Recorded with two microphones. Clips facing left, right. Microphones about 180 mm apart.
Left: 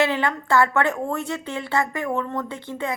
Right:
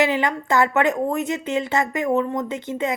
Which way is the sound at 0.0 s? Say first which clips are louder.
Right 2 dB; 15° right (ahead or behind).